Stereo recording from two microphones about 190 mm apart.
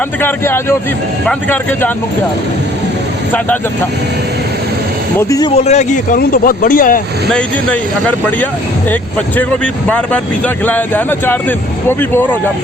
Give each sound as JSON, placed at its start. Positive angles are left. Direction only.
{"t": 0.2, "sound": "speech", "side_deg": 10}
{"t": 5.3, "sound": "speech", "side_deg": 20}
{"t": 5.5, "sound": "speech", "side_deg": 35}
{"t": 7.3, "sound": "speech", "side_deg": 5}